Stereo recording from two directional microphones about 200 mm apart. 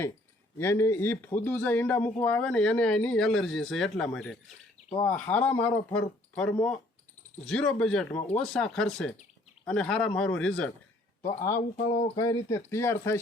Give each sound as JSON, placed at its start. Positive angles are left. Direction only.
{"t": 0.6, "sound": "speech", "side_deg": 10}